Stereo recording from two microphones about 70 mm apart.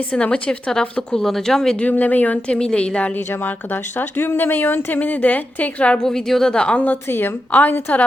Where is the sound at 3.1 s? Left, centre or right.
Left.